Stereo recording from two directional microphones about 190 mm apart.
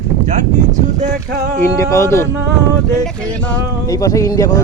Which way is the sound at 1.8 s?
15° left (ahead or behind).